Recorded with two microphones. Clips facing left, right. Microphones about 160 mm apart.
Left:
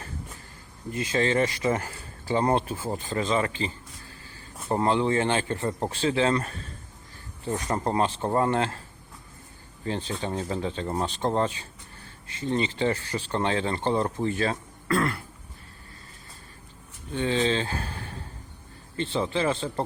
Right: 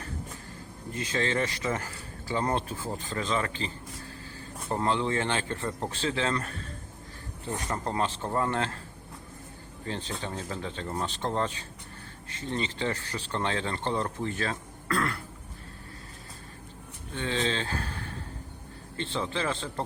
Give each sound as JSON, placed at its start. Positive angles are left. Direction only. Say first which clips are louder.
{"t": 0.9, "sound": "speech", "louder": "left 5 dB", "side_deg": 10}
{"t": 4.7, "sound": "speech", "louder": "left 4 dB", "side_deg": 15}
{"t": 7.9, "sound": "speech", "louder": "left 5 dB", "side_deg": 15}
{"t": 8.2, "sound": "speech", "louder": "left 5 dB", "side_deg": 25}
{"t": 9.8, "sound": "speech", "louder": "left 5 dB", "side_deg": 15}
{"t": 17.2, "sound": "speech", "louder": "left 5 dB", "side_deg": 10}
{"t": 18.9, "sound": "speech", "louder": "left 5 dB", "side_deg": 10}